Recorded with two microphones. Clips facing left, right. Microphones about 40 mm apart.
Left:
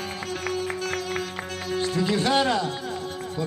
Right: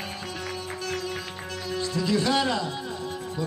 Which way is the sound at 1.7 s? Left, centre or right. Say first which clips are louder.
Left 2 dB; left.